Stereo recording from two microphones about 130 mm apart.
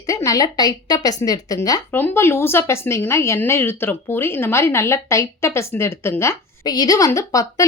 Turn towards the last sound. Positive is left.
turn(degrees=25)  # may be behind; listen again after turning